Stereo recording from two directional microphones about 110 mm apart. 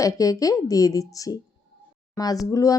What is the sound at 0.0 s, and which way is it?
Speech, 30° left (ahead or behind).